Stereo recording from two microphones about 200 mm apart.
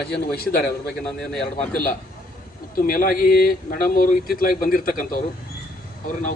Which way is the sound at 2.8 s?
45° left (ahead or behind).